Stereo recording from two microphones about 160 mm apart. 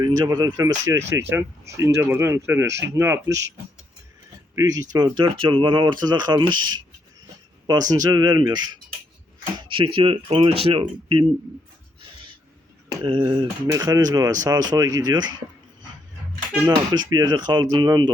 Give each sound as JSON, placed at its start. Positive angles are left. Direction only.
{"t": 0.0, "sound": "speech", "side_deg": -25}
{"t": 4.5, "sound": "speech", "side_deg": -25}
{"t": 13.1, "sound": "speech", "side_deg": -30}
{"t": 16.6, "sound": "speech", "side_deg": -25}